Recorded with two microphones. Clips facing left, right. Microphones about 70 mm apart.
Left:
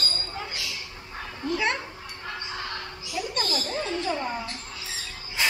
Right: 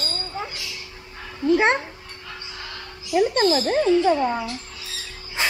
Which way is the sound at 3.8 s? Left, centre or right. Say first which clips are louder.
Right 12 dB; right.